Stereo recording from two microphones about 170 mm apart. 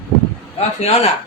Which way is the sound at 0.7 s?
40° left (ahead or behind).